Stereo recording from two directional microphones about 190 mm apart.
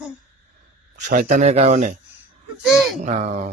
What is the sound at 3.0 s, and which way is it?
Speech, 40° right (ahead or behind).